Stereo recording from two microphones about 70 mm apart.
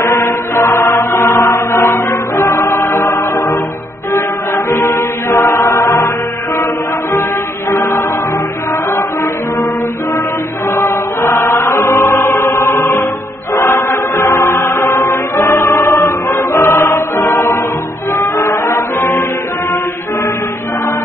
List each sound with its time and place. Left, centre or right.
0.0 s mantra: left
1.3 s chant: left
4.6 s music: left
10.7 s music: left